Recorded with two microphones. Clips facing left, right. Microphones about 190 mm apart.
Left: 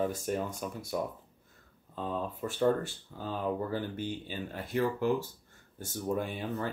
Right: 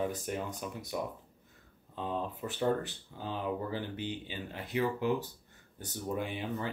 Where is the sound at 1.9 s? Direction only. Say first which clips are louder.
Left 1 dB; 45° left (ahead or behind).